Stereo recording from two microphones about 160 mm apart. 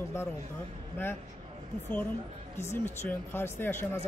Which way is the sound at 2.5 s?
15° left (ahead or behind).